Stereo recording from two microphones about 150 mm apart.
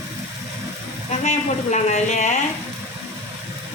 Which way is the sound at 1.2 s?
50° left (ahead or behind).